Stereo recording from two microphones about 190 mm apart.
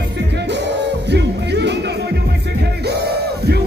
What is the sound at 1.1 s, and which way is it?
Music, 65° right (ahead or behind).